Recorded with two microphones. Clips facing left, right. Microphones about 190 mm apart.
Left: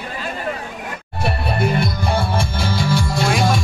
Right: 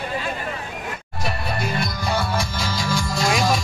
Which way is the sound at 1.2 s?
60° left (ahead or behind).